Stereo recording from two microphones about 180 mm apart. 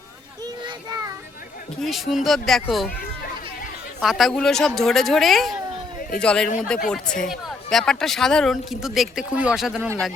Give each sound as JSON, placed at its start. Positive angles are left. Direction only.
{"t": 0.4, "sound": "a sound", "side_deg": -20}
{"t": 1.8, "sound": "speech", "side_deg": 0}
{"t": 4.0, "sound": "speech", "side_deg": 0}